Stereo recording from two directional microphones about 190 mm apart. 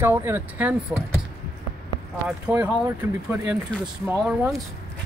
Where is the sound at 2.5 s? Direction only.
5° right (ahead or behind).